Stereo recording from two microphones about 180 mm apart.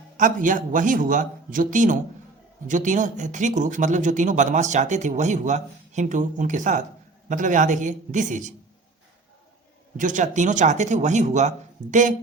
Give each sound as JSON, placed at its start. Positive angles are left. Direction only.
{"t": 0.2, "sound": "speech", "side_deg": -50}
{"t": 10.0, "sound": "speech", "side_deg": -45}